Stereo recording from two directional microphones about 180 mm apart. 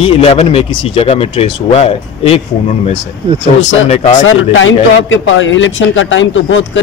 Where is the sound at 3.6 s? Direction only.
90° left.